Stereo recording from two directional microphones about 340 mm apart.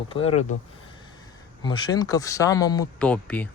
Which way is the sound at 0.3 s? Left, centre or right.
Left.